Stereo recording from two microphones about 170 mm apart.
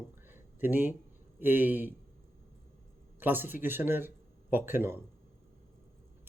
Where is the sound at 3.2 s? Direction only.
10° right (ahead or behind).